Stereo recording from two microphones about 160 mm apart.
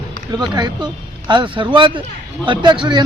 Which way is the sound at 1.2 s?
30° right (ahead or behind).